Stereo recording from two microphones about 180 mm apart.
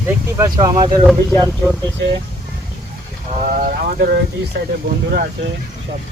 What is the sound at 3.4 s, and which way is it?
Speech, 55° right (ahead or behind).